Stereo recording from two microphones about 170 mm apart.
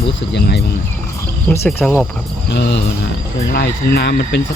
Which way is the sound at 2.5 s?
75° left (ahead or behind).